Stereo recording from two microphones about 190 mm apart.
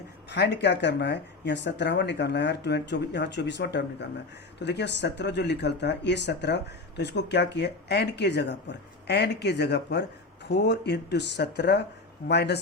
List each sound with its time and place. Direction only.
0.3 s speech: 65° left (ahead or behind)